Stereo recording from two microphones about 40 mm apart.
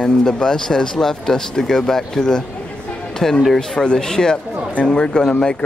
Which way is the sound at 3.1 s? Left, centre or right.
Centre.